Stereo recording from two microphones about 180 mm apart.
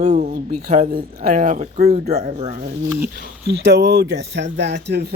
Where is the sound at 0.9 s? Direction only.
50° right (ahead or behind).